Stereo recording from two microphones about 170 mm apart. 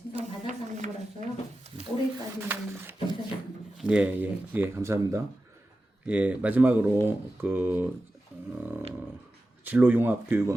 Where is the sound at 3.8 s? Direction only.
5° right (ahead or behind).